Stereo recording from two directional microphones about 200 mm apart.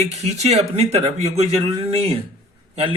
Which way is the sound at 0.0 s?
35° right (ahead or behind).